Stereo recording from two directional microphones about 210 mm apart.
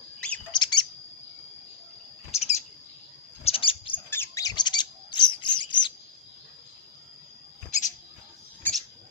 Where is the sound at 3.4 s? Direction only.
25° left (ahead or behind).